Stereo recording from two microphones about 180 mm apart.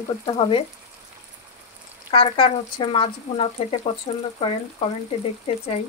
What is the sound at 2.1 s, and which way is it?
Speech, 30° left (ahead or behind).